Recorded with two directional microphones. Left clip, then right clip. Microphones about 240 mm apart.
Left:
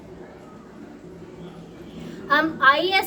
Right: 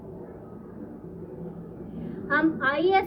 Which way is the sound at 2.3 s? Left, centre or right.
Centre.